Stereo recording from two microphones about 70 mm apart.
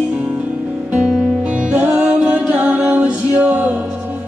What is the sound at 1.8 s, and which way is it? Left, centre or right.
Music, centre.